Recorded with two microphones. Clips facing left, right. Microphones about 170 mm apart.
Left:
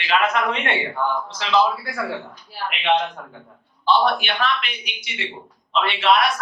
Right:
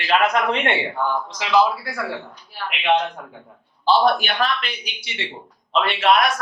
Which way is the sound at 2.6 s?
5° right (ahead or behind).